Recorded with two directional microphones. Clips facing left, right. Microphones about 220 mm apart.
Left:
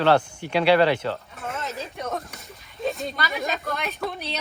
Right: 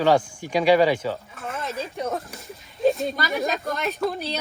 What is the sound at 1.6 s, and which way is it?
Speech, centre (ahead or behind).